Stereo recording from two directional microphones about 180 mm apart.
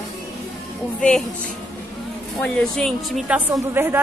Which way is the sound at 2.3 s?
5° left (ahead or behind).